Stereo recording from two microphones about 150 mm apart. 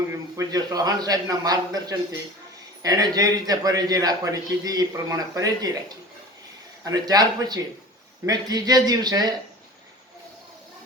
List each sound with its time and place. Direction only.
0.1 s a man's voice: 20° right (ahead or behind)
6.8 s a man's voice: 25° right (ahead or behind)